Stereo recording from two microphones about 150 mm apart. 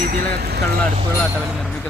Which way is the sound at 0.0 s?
85° right.